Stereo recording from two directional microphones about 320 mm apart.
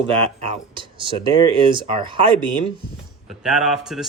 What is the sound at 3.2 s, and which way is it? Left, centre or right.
Speech, centre.